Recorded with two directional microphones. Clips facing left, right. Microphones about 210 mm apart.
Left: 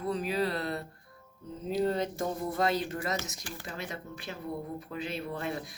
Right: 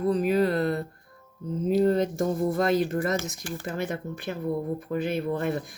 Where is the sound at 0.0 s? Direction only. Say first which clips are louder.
Right 8 dB; 45° right (ahead or behind).